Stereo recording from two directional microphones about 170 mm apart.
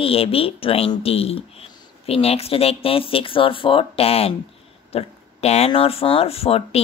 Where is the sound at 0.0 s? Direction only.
35° left (ahead or behind).